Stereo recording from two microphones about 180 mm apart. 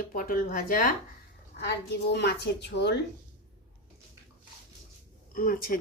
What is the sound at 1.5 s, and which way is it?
A woman's voice, 70° left (ahead or behind).